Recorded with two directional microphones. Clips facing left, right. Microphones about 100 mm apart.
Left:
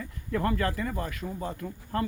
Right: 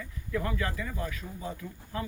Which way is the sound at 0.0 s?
50° left (ahead or behind).